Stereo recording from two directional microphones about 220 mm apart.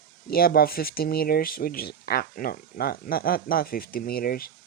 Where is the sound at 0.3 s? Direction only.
45° left (ahead or behind).